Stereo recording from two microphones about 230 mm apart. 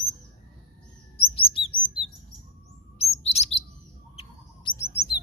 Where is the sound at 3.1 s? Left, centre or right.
Left.